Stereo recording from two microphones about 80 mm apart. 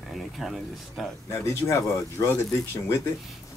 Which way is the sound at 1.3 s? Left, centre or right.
Left.